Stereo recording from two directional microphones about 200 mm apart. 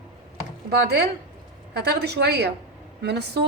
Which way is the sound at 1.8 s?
55° right (ahead or behind).